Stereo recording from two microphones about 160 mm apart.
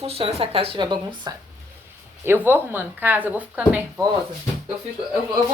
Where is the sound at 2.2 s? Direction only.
15° right (ahead or behind).